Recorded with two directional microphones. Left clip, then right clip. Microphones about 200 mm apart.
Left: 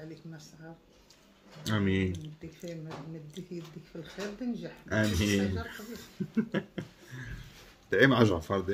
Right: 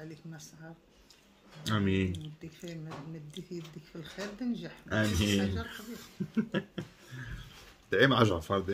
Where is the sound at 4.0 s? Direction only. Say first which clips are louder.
Left 1 dB; 40° right (ahead or behind).